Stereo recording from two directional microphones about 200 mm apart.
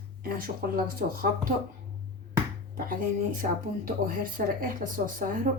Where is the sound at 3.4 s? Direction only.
45° right (ahead or behind).